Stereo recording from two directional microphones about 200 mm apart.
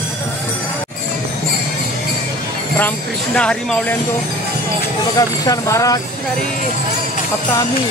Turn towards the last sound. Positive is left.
turn(degrees=15)  # may be behind; listen again after turning